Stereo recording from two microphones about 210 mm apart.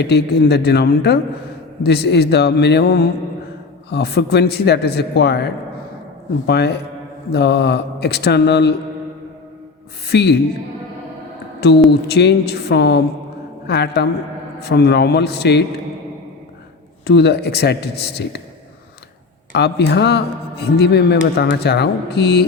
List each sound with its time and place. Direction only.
0.0 s a man's voice: 50° left (ahead or behind)
6.5 s a man's voice: 55° left (ahead or behind)
10.1 s a man's voice: 55° left (ahead or behind)
11.9 s a man's voice: 50° left (ahead or behind)
17.1 s a man's voice: 50° left (ahead or behind)
19.5 s a man's voice: 50° left (ahead or behind)